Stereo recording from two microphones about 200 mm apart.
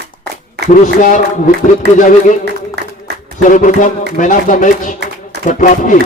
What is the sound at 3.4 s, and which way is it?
A man's voice, 40° left (ahead or behind).